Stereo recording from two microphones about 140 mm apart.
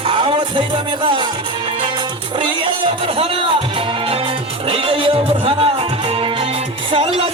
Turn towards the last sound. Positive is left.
turn(degrees=-40)  # may be behind; listen again after turning